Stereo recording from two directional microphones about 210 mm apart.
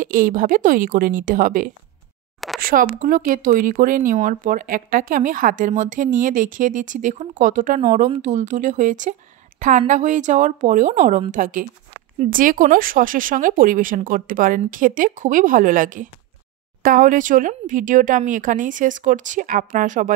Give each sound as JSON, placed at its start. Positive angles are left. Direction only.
{"t": 0.0, "sound": "speech", "side_deg": -40}